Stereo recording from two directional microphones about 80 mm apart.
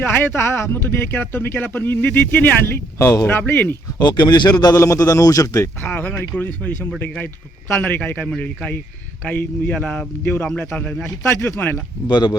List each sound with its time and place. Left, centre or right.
0.0 s speech: left
3.0 s a man's voice: left
3.2 s speech: left
3.9 s speech: left
4.7 s a man's voice: left
5.8 s speech: left
10.9 s a man's voice: centre
11.3 s a man's voice: left
12.0 s speech: left